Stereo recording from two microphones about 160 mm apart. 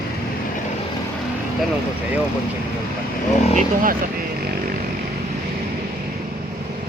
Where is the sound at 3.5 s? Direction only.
60° right (ahead or behind).